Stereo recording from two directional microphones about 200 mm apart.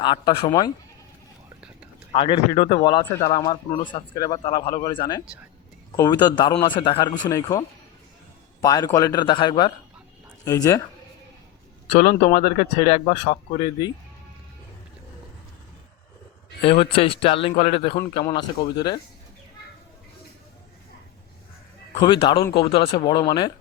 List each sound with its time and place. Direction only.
0.0 s speech: 20° left (ahead or behind)
2.1 s speech: 25° left (ahead or behind)
8.6 s speech: 15° left (ahead or behind)
11.9 s speech: 40° left (ahead or behind)
13.7 s speech: 20° left (ahead or behind)
16.6 s speech: 25° left (ahead or behind)
21.9 s speech: 25° left (ahead or behind)